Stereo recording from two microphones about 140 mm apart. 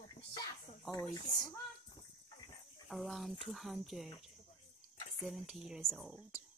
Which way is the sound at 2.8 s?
Centre (ahead or behind).